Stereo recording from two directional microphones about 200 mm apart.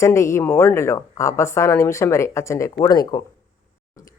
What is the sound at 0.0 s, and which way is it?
Speech, 15° left (ahead or behind).